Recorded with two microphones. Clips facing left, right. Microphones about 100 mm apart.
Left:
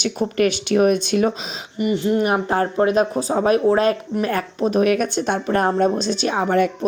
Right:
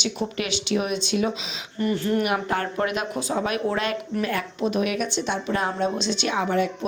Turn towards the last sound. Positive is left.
turn(degrees=40)  # may be behind; listen again after turning